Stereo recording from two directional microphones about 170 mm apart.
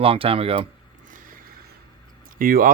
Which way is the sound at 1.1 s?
50° right (ahead or behind).